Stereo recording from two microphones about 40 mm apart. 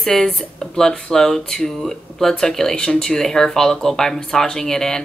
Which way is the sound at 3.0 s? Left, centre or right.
Centre.